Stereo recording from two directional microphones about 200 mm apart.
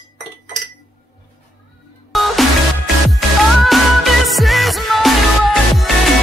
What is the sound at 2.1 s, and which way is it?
Music, centre (ahead or behind).